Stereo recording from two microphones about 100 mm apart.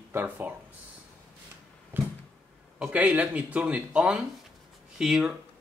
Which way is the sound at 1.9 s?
20° right (ahead or behind).